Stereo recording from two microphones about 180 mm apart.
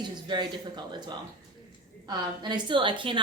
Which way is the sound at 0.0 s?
25° right (ahead or behind).